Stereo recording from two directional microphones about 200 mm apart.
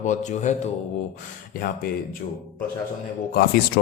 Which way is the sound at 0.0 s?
35° left (ahead or behind).